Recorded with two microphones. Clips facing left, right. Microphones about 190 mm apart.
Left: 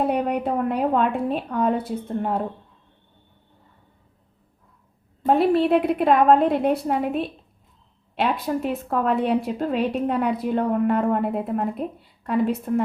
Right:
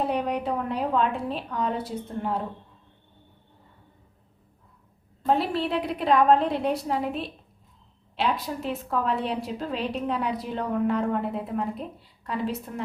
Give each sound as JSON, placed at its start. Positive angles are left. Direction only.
{"t": 0.1, "sound": "a woman's voice", "side_deg": 55}
{"t": 5.2, "sound": "a woman's voice", "side_deg": 55}